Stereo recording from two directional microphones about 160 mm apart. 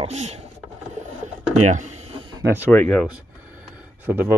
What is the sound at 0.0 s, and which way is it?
Speech, 40° right (ahead or behind).